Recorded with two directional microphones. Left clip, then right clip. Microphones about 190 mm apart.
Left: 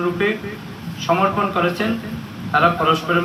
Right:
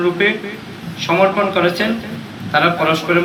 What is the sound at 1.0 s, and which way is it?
A man's voice, 30° left (ahead or behind).